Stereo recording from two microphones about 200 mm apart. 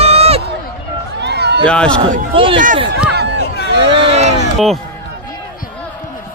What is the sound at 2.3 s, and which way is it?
Speech, 25° right (ahead or behind).